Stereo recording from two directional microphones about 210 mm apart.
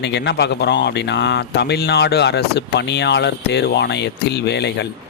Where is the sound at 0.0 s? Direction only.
55° left (ahead or behind).